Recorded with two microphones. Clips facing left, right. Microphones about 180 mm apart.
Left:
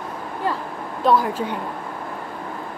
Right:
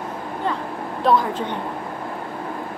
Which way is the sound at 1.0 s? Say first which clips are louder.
Even; 5° left (ahead or behind).